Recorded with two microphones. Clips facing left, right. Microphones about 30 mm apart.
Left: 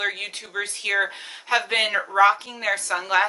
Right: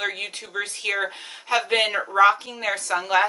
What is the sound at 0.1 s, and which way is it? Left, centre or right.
A woman's voice, centre.